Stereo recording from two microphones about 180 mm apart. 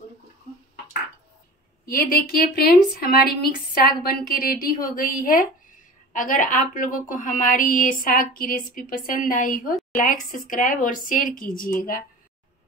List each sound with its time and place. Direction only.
1.9 s a woman's voice: 55° left (ahead or behind)